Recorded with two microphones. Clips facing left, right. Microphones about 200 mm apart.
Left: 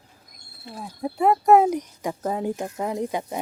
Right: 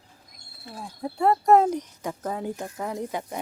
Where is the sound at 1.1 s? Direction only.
5° left (ahead or behind).